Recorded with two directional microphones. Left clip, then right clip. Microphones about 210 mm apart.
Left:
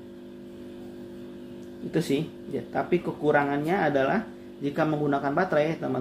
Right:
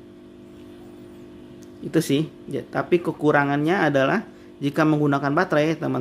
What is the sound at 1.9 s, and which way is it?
Speech, 50° right (ahead or behind).